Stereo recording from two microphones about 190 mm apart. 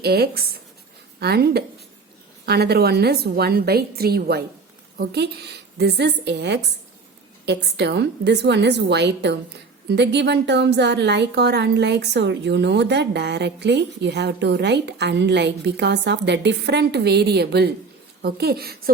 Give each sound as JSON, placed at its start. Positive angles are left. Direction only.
{"t": 0.0, "sound": "a woman's voice", "side_deg": -55}